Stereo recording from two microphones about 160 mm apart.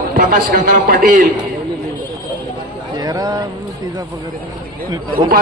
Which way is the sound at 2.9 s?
25° right (ahead or behind).